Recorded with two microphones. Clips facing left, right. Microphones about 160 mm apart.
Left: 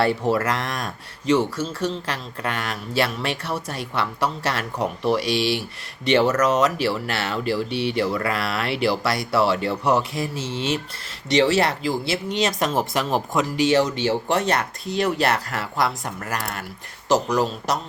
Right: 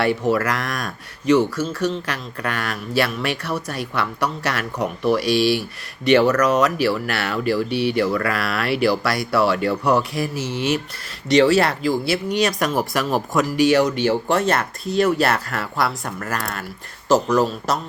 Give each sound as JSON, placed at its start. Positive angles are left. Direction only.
{"t": 0.3, "sound": "speech", "side_deg": 30}